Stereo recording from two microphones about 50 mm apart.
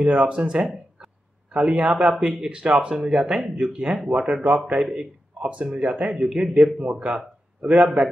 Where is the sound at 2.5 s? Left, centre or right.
Centre.